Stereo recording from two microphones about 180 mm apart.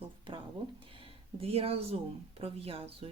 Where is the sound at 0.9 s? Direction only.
30° right (ahead or behind).